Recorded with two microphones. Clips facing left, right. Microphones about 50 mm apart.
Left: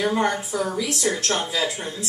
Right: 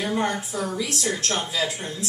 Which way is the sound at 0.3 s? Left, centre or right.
Left.